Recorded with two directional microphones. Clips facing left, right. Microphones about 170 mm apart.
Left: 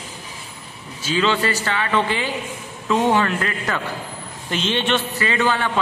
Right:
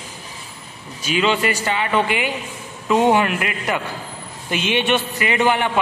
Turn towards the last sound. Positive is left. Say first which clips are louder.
# right 2 dB
turn(degrees=-20)  # may be behind; listen again after turning